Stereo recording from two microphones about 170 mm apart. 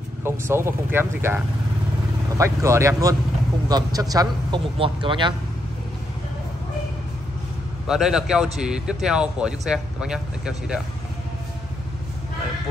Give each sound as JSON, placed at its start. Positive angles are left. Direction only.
{"t": 0.2, "sound": "a man's voice", "side_deg": -15}
{"t": 7.8, "sound": "speech", "side_deg": -5}